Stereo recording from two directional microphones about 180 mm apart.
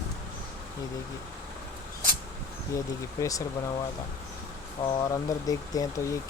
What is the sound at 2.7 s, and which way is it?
Speech, 15° left (ahead or behind).